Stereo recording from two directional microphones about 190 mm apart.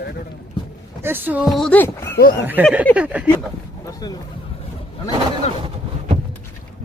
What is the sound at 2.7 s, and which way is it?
Speech, 5° right (ahead or behind).